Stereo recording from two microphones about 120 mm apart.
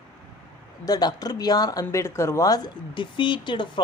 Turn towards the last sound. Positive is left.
turn(degrees=40)  # may be behind; listen again after turning